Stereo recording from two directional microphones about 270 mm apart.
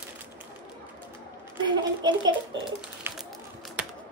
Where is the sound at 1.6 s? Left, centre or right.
Centre.